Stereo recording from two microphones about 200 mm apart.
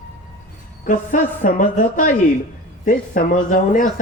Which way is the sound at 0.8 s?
40° left (ahead or behind).